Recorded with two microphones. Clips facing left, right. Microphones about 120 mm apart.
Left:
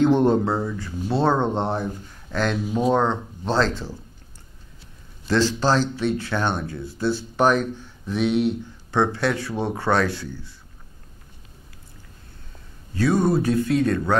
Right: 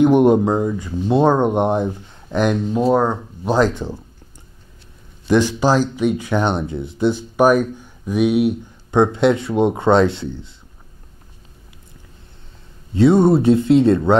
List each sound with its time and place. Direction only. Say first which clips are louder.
0.0 s speech: right 5 dB; 15° right (ahead or behind)
5.3 s speech: right 5 dB; 15° right (ahead or behind)
12.9 s speech: right 7 dB; 25° right (ahead or behind)